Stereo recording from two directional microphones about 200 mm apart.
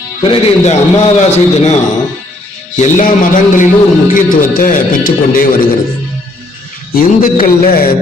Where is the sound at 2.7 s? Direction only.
40° left (ahead or behind).